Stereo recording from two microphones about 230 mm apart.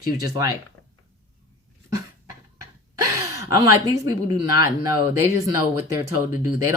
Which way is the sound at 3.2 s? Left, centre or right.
Centre.